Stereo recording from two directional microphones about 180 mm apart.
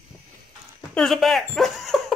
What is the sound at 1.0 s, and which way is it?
Speech, centre (ahead or behind).